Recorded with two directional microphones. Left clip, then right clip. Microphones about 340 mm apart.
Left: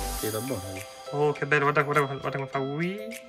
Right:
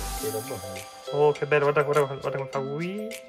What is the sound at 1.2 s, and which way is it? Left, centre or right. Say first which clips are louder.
Speech: right 2 dB; centre.